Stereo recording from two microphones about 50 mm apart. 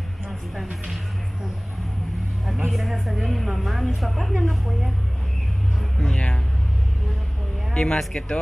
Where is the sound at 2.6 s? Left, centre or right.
Centre.